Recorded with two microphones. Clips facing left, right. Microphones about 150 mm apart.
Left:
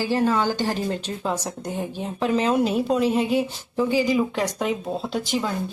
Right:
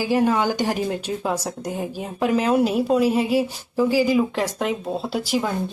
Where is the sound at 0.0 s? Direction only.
15° right (ahead or behind).